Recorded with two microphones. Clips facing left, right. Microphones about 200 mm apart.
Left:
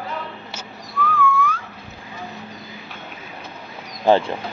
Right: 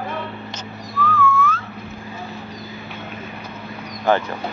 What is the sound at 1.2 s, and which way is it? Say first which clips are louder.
Whistling: right 1 dB; 15° left (ahead or behind).